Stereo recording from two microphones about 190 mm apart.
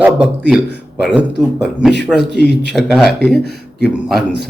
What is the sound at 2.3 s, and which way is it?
Speech, 60° right (ahead or behind).